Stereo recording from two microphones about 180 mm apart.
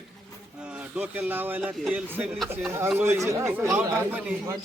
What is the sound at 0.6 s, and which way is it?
A man's voice, 5° right (ahead or behind).